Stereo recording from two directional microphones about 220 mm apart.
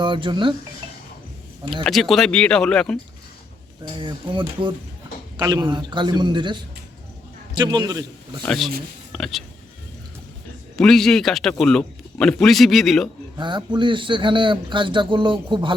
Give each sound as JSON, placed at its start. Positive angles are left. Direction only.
{"t": 0.0, "sound": "speech", "side_deg": -20}
{"t": 1.7, "sound": "speech", "side_deg": 0}
{"t": 3.9, "sound": "a man's voice", "side_deg": -20}
{"t": 8.4, "sound": "speech", "side_deg": 0}
{"t": 10.8, "sound": "speech", "side_deg": 0}
{"t": 13.3, "sound": "a man's voice", "side_deg": -20}